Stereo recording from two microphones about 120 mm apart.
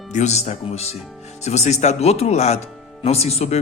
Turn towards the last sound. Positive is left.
turn(degrees=65)  # may be behind; listen again after turning